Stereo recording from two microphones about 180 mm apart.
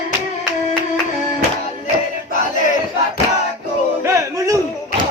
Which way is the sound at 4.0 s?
15° right (ahead or behind).